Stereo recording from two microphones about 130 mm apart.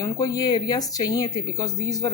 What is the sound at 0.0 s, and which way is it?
A woman's voice, 25° left (ahead or behind).